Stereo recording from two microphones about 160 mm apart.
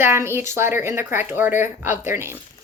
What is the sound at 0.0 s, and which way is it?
Speech, 15° right (ahead or behind).